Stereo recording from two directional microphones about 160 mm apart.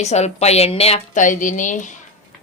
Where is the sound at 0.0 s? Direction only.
45° left (ahead or behind).